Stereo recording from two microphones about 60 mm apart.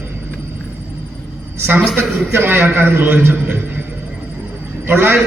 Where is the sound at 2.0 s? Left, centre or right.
Right.